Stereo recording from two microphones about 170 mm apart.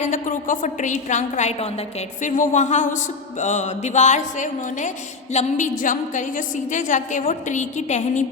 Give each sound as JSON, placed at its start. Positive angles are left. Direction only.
{"t": 0.0, "sound": "a woman's voice", "side_deg": 50}